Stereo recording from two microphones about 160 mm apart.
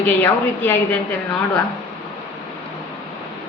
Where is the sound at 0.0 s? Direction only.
10° left (ahead or behind).